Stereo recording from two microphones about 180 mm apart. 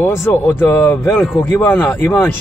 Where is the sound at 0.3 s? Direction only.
10° left (ahead or behind).